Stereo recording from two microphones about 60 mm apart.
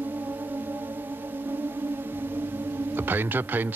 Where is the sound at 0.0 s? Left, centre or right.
Right.